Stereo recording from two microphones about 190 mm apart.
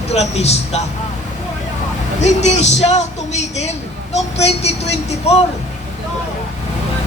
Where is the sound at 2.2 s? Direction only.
35° left (ahead or behind).